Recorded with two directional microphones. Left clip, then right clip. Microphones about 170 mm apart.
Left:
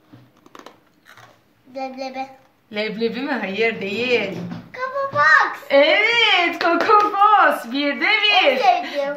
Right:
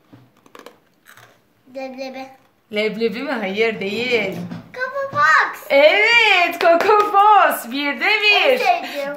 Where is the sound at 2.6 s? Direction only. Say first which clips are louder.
Right 3 dB; 55° right (ahead or behind).